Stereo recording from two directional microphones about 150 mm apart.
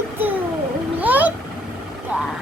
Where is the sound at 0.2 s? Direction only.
10° right (ahead or behind).